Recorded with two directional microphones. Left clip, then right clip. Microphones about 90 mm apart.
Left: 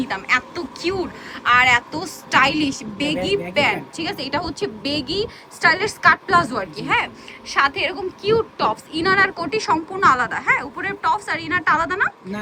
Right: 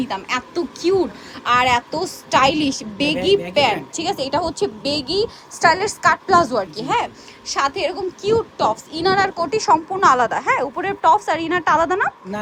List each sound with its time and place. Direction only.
0.0 s a woman's voice: 35° right (ahead or behind)